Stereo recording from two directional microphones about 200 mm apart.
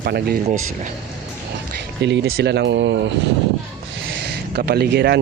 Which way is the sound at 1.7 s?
60° right (ahead or behind).